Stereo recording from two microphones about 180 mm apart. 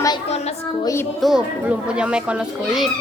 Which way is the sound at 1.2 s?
5° right (ahead or behind).